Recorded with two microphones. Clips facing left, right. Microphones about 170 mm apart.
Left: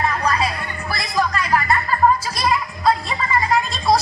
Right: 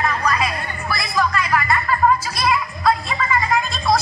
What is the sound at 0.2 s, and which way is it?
Music, 30° left (ahead or behind).